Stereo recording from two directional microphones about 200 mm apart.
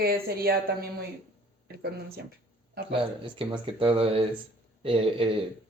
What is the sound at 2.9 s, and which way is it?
Speech, 25° right (ahead or behind).